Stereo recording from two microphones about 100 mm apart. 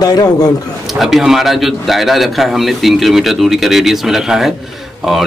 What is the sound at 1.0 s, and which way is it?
A man's voice, centre (ahead or behind).